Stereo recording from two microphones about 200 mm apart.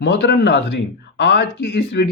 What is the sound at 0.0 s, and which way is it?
Speech, 60° left (ahead or behind).